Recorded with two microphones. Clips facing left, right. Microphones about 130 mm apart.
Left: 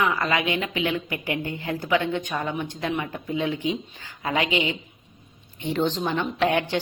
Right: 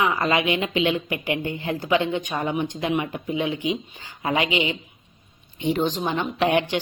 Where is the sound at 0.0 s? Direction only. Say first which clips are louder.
Right 2 dB; 20° right (ahead or behind).